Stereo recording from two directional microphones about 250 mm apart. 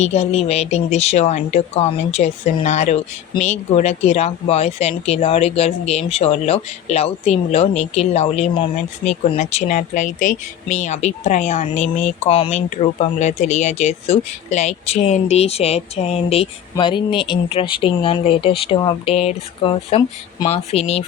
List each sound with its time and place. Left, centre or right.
0.0 s speech: left